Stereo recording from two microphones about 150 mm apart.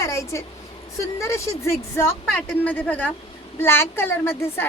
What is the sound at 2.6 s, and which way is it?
A woman's voice, 10° left (ahead or behind).